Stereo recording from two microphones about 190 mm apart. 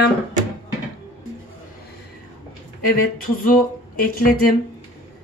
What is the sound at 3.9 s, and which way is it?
Speech, 50° left (ahead or behind).